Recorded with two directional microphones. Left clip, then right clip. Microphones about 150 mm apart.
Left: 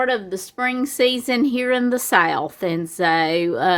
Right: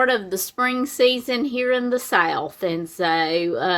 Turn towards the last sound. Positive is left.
turn(degrees=30)  # may be behind; listen again after turning